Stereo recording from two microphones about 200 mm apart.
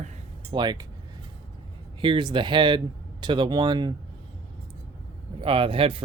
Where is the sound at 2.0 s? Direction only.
25° right (ahead or behind).